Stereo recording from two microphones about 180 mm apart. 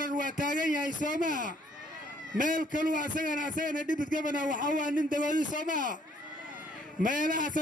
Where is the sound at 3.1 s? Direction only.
45° right (ahead or behind).